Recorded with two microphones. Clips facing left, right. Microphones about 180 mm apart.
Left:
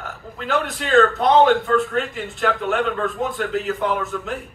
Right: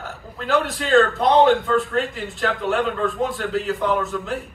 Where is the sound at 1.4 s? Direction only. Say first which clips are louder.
Even; 35° right (ahead or behind).